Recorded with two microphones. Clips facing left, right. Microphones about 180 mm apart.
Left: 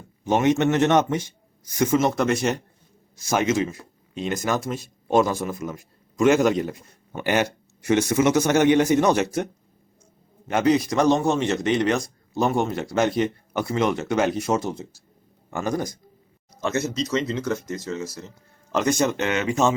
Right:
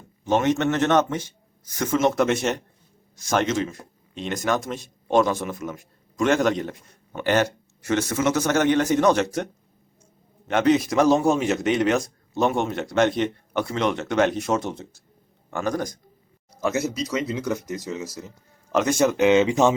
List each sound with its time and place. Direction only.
0.3 s a man's voice: 10° left (ahead or behind)
2.0 s speech: centre (ahead or behind)
10.5 s a man's voice: centre (ahead or behind)
16.6 s speech: 10° right (ahead or behind)
18.7 s speech: 5° right (ahead or behind)
19.3 s speech: 20° right (ahead or behind)